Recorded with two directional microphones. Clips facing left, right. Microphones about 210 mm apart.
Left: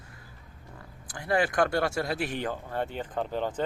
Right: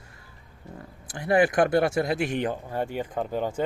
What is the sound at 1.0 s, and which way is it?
Speech, 20° right (ahead or behind).